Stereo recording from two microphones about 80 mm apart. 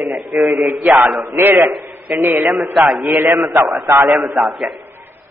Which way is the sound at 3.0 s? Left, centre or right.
Right.